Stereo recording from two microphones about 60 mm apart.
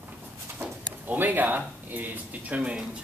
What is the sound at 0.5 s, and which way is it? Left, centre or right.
Speech, right.